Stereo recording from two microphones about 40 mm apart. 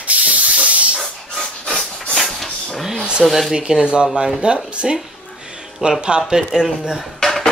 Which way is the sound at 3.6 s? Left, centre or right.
Centre.